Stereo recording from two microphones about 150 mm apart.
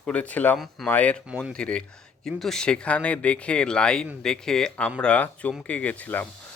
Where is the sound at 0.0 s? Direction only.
10° left (ahead or behind).